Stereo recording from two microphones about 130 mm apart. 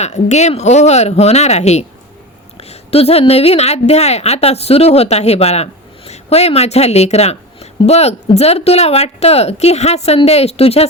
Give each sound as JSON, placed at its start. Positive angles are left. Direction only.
{"t": 0.0, "sound": "a woman's voice", "side_deg": 60}